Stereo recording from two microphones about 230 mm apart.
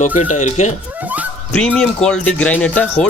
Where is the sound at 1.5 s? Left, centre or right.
Centre.